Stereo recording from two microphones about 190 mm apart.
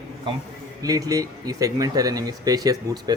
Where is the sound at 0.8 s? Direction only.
20° right (ahead or behind).